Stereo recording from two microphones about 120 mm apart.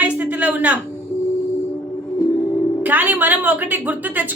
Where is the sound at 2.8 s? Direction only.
15° right (ahead or behind).